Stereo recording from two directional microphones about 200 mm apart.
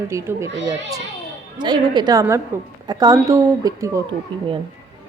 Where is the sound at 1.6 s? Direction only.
20° right (ahead or behind).